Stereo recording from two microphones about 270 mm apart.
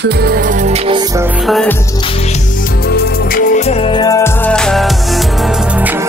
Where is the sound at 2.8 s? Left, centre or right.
Left; by 5.9 s centre.